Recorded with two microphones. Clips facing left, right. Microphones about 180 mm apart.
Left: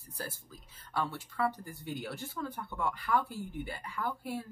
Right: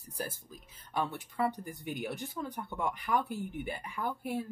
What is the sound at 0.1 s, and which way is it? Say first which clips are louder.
Speech: right 3 dB; 15° right (ahead or behind).